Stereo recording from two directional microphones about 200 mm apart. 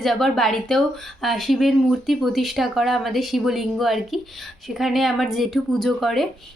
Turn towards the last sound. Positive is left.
turn(degrees=0)  # may be behind; listen again after turning